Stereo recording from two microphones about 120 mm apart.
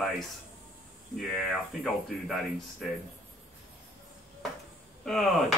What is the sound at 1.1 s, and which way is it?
Speech, centre (ahead or behind).